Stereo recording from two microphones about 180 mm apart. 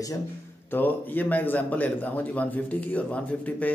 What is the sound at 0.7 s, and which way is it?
Speech, 10° left (ahead or behind).